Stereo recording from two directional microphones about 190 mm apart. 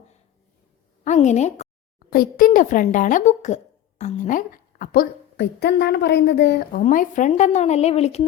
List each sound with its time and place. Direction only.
1.0 s speech: 40° left (ahead or behind)
2.0 s speech: 50° left (ahead or behind)
6.8 s speech: 40° left (ahead or behind)